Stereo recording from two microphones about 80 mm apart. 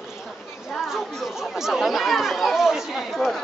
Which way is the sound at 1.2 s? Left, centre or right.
Centre.